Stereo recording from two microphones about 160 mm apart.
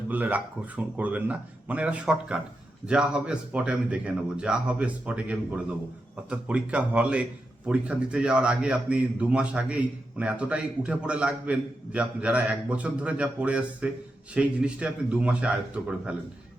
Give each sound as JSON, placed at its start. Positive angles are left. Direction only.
{"t": 0.1, "sound": "a man's voice", "side_deg": -10}